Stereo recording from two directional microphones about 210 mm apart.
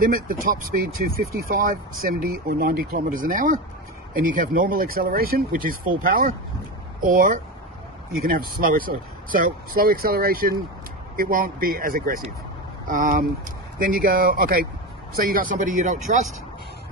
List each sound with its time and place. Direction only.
0.0 s speech: 40° right (ahead or behind)